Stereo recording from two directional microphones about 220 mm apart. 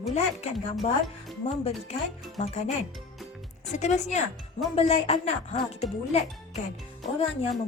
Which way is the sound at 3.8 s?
30° left (ahead or behind).